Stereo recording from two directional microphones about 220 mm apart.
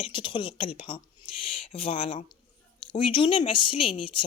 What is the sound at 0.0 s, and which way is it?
A woman's voice, 20° left (ahead or behind).